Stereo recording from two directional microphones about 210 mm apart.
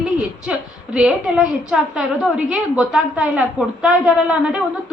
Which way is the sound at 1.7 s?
5° right (ahead or behind).